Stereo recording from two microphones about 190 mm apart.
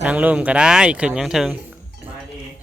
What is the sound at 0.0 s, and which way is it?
Speech, 5° right (ahead or behind).